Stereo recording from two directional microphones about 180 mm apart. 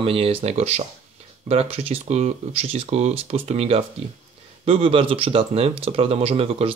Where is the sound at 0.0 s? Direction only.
30° right (ahead or behind).